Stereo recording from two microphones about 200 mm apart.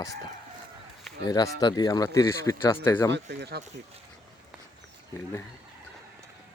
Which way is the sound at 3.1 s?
55° right (ahead or behind).